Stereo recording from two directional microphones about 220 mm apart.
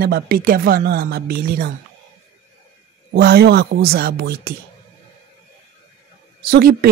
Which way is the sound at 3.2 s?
45° right (ahead or behind).